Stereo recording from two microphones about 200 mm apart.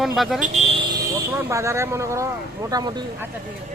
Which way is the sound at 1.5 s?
15° right (ahead or behind).